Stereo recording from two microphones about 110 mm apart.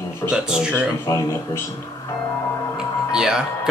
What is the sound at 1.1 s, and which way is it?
Speech, 25° left (ahead or behind).